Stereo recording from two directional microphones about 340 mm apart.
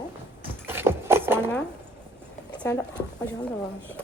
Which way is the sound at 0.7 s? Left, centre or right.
Centre.